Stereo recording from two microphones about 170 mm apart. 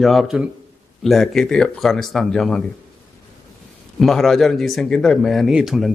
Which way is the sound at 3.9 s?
Centre (ahead or behind).